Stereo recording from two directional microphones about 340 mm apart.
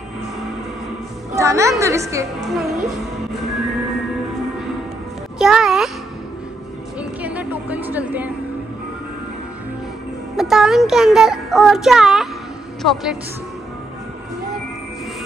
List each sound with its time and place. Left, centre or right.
1.3 s a woman's voice: centre
5.4 s a sound: centre
7.0 s music: centre
10.3 s speech: centre